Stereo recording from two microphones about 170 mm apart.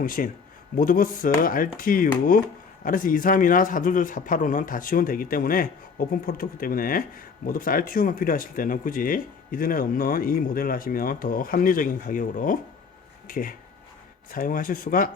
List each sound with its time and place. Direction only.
0.0 s a man's voice: 55° left (ahead or behind)